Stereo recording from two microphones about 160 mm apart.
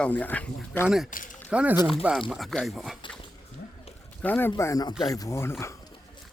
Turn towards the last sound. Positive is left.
turn(degrees=15)  # may be behind; listen again after turning